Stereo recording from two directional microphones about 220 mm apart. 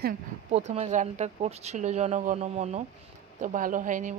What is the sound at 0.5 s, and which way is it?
A woman's voice, 30° right (ahead or behind).